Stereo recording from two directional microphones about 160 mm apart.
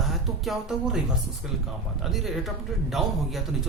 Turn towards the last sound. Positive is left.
turn(degrees=0)  # may be behind; listen again after turning